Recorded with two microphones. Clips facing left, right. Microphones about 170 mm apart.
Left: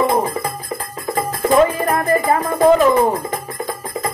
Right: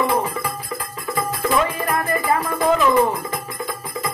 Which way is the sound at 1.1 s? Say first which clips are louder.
Left 5 dB; 40° left (ahead or behind).